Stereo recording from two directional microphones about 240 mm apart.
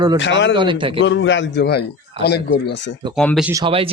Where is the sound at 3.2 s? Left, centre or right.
Centre.